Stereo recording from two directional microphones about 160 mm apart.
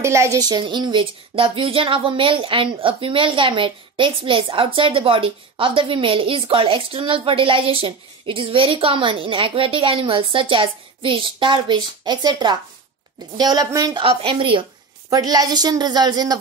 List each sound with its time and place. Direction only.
0.0 s a woman's voice: 20° right (ahead or behind)
14.0 s a woman's voice: 35° right (ahead or behind)